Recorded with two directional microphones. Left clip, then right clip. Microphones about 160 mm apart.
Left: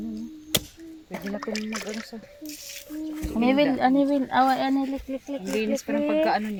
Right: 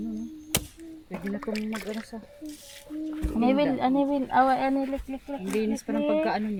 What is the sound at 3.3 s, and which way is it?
Speech, 10° left (ahead or behind).